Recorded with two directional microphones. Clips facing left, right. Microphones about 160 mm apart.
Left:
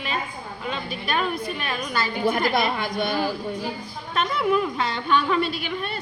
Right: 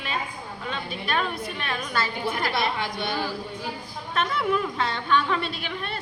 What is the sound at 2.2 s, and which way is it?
Speech, 50° left (ahead or behind).